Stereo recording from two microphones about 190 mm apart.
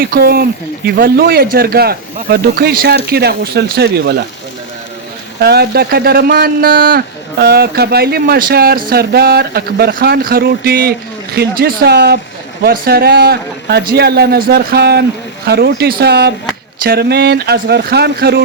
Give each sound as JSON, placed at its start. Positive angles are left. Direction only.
{"t": 0.0, "sound": "a man's voice", "side_deg": -50}
{"t": 5.4, "sound": "a man's voice", "side_deg": -55}